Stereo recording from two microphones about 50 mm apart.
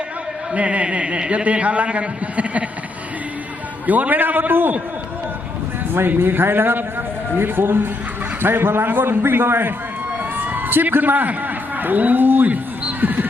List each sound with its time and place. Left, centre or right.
0.5 s a man's voice: right
3.8 s a man's voice: right
5.9 s a man's voice: right
10.3 s a sound: right
11.8 s a man's voice: right
12.8 s music: right